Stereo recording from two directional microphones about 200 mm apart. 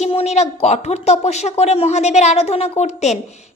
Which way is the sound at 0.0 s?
30° left (ahead or behind).